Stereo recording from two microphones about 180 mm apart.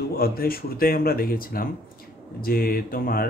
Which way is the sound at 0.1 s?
55° left (ahead or behind).